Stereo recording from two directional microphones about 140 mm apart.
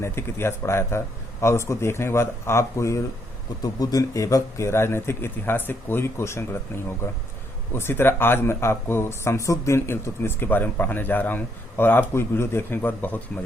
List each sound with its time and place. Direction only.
0.0 s speech: 20° left (ahead or behind)
7.7 s speech: 15° left (ahead or behind)